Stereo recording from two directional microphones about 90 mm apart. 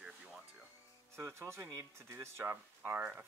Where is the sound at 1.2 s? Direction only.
30° right (ahead or behind).